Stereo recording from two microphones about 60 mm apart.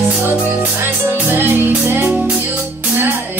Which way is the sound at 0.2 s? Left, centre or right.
Right.